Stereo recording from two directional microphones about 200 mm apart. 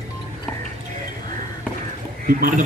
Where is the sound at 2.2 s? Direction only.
45° right (ahead or behind).